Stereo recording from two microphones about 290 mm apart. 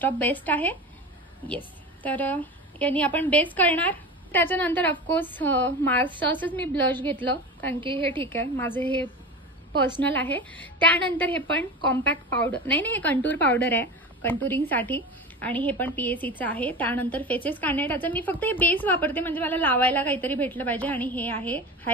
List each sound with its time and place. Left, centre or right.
0.0 s a woman's voice: centre